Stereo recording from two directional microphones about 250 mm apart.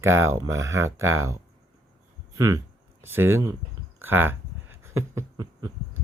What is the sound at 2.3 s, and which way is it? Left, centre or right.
Speech, centre.